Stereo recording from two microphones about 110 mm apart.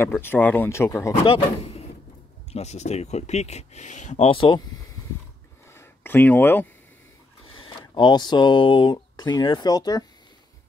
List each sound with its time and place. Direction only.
0.0 s speech: 20° left (ahead or behind)
1.2 s speech: 60° left (ahead or behind)
2.5 s speech: 85° left; by 4.6 s 55° left (ahead or behind)
5.7 s a sound: 20° left (ahead or behind)
7.4 s speech: 50° left (ahead or behind)